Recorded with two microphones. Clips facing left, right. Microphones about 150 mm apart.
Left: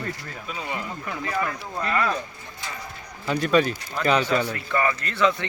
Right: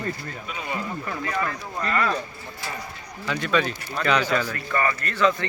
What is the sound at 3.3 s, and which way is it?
Speech, 40° left (ahead or behind).